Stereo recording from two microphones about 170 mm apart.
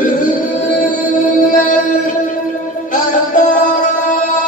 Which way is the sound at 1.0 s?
50° left (ahead or behind).